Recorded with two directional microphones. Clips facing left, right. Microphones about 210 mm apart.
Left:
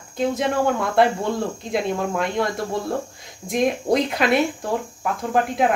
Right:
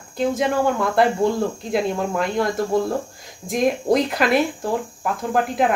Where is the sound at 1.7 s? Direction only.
Centre (ahead or behind).